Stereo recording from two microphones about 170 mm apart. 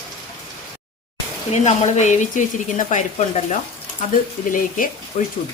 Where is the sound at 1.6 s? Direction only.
45° left (ahead or behind).